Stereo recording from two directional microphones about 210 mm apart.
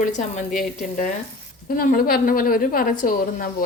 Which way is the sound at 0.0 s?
35° left (ahead or behind).